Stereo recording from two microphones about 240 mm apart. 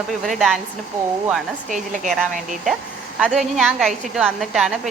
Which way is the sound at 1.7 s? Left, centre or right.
Right.